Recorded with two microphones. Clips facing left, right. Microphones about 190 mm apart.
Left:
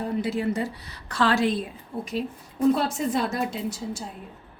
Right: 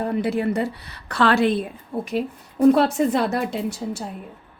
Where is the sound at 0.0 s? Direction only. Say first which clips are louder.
Right 4 dB; 60° right (ahead or behind).